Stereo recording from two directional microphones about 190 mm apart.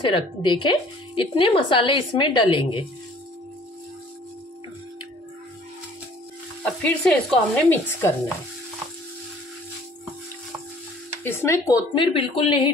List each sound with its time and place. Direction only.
0.0 s speech: 25° left (ahead or behind)
6.6 s speech: 5° left (ahead or behind)
11.2 s speech: 15° left (ahead or behind)